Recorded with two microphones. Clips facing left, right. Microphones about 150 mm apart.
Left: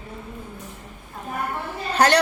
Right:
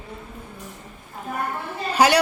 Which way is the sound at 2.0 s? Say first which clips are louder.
Right 1 dB; 10° right (ahead or behind).